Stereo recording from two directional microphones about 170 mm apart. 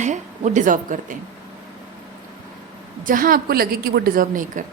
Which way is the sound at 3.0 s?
55° right (ahead or behind).